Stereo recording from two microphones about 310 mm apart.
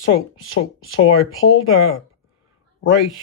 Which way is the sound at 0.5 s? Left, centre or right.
Left.